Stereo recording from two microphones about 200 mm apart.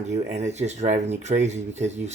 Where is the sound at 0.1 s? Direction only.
35° right (ahead or behind).